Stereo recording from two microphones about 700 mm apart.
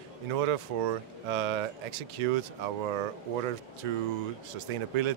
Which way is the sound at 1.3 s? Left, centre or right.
Right.